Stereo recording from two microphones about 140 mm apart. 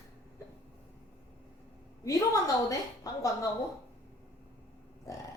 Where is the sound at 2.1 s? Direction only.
25° left (ahead or behind).